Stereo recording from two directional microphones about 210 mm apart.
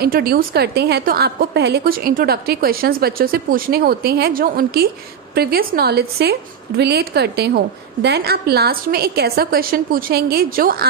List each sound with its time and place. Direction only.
0.0 s a woman's voice: 45° right (ahead or behind)